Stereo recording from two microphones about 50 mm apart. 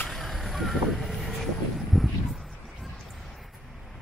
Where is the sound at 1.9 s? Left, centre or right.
Centre.